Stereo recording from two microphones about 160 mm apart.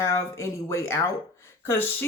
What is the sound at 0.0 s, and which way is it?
Speech, 15° left (ahead or behind).